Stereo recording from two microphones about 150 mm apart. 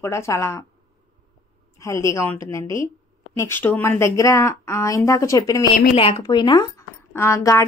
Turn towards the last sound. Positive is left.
turn(degrees=20)  # may be behind; listen again after turning